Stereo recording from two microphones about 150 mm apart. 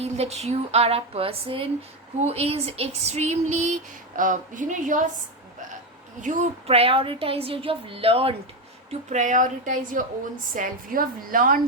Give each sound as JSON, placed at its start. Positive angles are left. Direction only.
{"t": 0.0, "sound": "speech", "side_deg": -45}
{"t": 6.2, "sound": "a woman's voice", "side_deg": -60}
{"t": 6.7, "sound": "a woman's voice", "side_deg": -40}
{"t": 8.9, "sound": "a woman's voice", "side_deg": -50}